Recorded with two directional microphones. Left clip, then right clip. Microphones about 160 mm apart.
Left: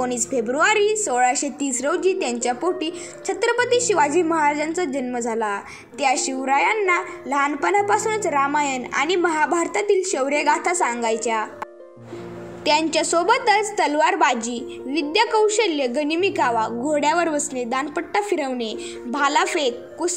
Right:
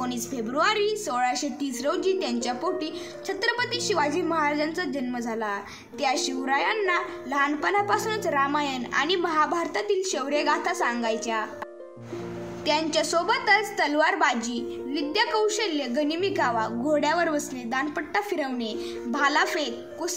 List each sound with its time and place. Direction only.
0.0 s a woman's voice: 15° left (ahead or behind)
12.6 s a woman's voice: 15° left (ahead or behind)